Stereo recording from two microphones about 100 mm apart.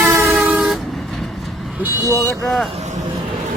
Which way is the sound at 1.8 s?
20° right (ahead or behind).